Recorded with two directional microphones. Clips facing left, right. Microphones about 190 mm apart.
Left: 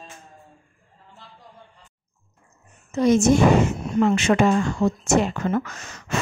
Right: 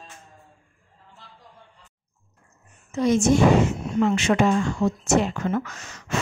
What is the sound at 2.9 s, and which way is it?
A woman's voice, 40° left (ahead or behind).